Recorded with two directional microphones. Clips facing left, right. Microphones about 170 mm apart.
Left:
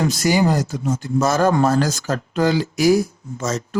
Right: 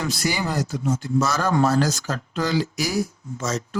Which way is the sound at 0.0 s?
45° left (ahead or behind).